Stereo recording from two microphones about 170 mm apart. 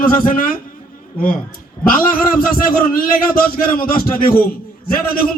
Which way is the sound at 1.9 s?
55° left (ahead or behind).